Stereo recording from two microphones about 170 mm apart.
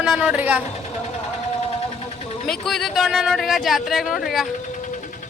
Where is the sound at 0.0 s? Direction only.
5° right (ahead or behind).